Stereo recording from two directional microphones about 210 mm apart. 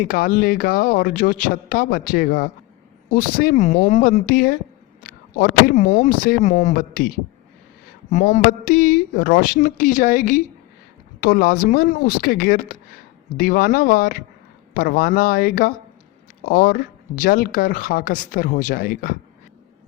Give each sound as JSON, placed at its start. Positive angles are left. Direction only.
{"t": 0.0, "sound": "speech", "side_deg": 45}
{"t": 8.1, "sound": "speech", "side_deg": 40}